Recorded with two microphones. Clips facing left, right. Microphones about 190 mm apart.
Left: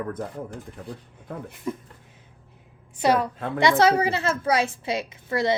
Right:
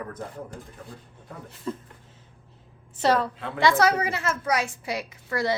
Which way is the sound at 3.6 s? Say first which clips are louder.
Left 2 dB; 25° left (ahead or behind).